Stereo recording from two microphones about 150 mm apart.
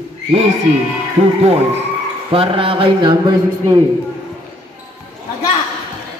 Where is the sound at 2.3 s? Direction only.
35° right (ahead or behind).